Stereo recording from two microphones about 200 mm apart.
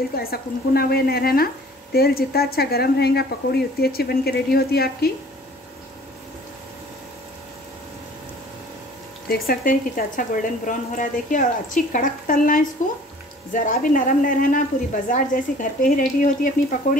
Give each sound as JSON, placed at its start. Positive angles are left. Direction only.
{"t": 0.1, "sound": "speech", "side_deg": 50}
{"t": 9.3, "sound": "a woman's voice", "side_deg": 45}